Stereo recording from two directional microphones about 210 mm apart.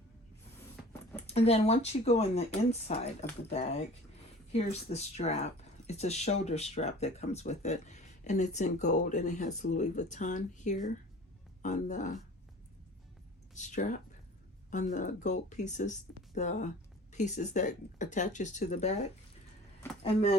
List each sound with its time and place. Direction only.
1.3 s speech: 30° left (ahead or behind)
13.5 s speech: 35° left (ahead or behind)